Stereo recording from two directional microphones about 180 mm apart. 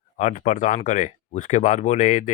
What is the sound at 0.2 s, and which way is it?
Speech, 40° left (ahead or behind).